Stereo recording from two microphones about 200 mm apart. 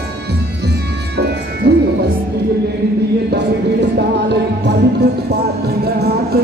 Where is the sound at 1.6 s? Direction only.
50° right (ahead or behind).